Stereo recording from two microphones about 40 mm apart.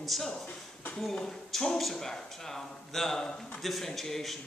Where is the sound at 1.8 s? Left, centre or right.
Centre.